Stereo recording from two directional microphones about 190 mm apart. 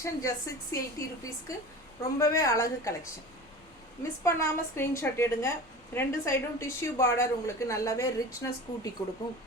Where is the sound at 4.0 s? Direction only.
15° left (ahead or behind).